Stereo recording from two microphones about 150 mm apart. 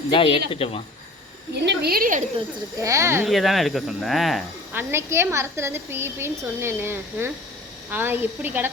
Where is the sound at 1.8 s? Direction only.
80° right.